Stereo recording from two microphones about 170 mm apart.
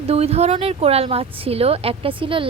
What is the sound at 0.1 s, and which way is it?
A woman's voice, 35° right (ahead or behind).